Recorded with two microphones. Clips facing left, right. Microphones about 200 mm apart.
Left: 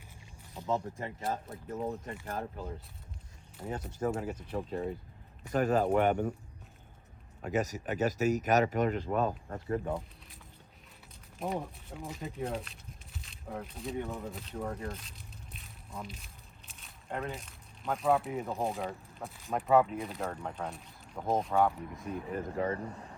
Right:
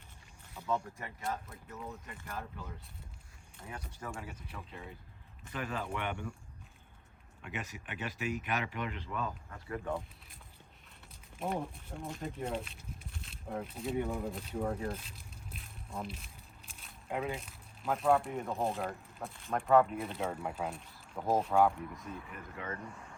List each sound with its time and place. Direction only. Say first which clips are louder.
0.5 s speech: left 3 dB; 20° left (ahead or behind)
4.0 s speech: left 12 dB; 40° left (ahead or behind)
7.4 s speech: left 11 dB; 40° left (ahead or behind)
11.4 s speech: left 1 dB; centre (ahead or behind)
14.0 s speech: right 2 dB; 15° right (ahead or behind)
22.3 s speech: left 10 dB; 35° left (ahead or behind)